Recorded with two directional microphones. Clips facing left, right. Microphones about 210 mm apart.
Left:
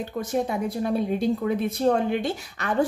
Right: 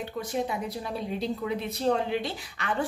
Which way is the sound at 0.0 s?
45° left (ahead or behind).